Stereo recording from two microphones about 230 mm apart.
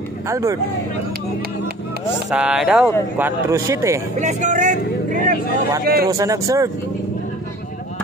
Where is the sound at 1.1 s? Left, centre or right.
Right.